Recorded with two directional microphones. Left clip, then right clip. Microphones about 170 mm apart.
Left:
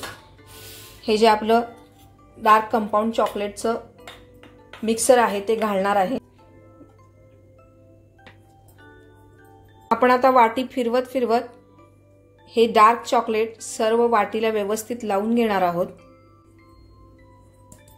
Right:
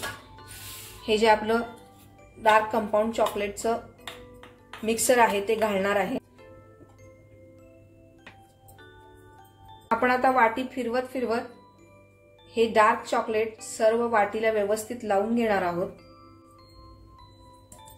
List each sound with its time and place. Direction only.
1.0 s a woman's voice: 40° left (ahead or behind)
4.8 s a woman's voice: 30° left (ahead or behind)
9.9 s a woman's voice: 40° left (ahead or behind)
12.4 s a woman's voice: 45° left (ahead or behind)